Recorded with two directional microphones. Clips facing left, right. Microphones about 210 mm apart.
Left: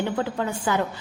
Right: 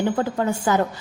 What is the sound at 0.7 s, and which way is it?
Speech, 40° right (ahead or behind).